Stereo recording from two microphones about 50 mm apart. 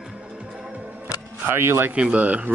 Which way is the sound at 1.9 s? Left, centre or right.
Right.